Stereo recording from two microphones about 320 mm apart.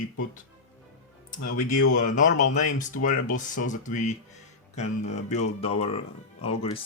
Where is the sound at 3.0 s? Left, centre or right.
Left.